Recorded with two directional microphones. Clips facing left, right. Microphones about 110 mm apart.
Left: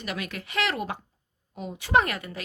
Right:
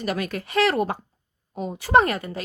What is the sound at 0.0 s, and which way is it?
Speech, 40° right (ahead or behind).